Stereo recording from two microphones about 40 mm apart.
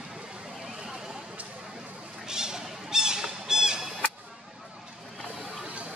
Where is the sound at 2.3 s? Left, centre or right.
Centre.